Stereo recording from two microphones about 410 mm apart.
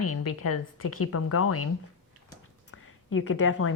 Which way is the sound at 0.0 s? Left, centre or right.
Left.